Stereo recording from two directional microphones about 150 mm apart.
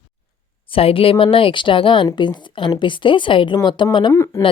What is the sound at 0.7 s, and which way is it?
Speech, 40° left (ahead or behind).